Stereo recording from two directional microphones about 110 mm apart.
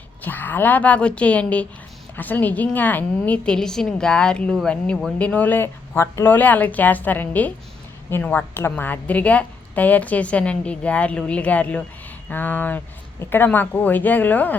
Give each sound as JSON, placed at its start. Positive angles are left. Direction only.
{"t": 0.2, "sound": "a woman's voice", "side_deg": 15}